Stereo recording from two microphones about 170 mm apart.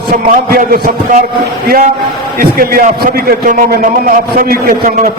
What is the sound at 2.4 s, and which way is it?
A man's voice, 60° right (ahead or behind).